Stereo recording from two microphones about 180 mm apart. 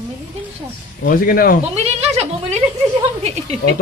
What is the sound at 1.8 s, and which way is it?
Speech, 35° right (ahead or behind).